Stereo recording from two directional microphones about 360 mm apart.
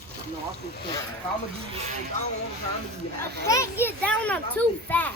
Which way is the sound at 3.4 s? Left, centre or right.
Centre.